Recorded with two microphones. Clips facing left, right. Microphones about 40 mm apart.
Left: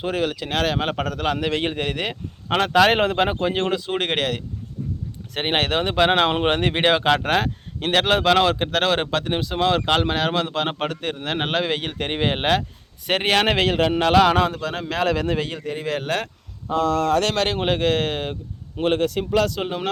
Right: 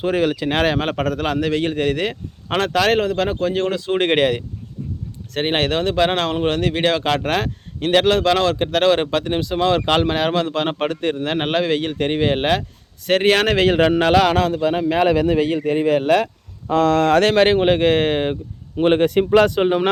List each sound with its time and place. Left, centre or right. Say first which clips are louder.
0.0 s speech: right 5 dB; centre
0.8 s speech: right 3 dB; centre
1.4 s speech: right 4 dB; centre
3.4 s speech: right 2 dB; centre
3.7 s speech: right 5 dB; centre
5.3 s speech: right 2 dB; centre
6.4 s speech: right 1 dB; left
7.0 s speech: even; centre
13.7 s speech: right 4 dB; centre
14.7 s speech: right 6 dB; centre
16.6 s speech: right 5 dB; right
17.2 s speech: right 8 dB; right
17.6 s speech: right 5 dB; centre
18.9 s speech: right 6 dB; right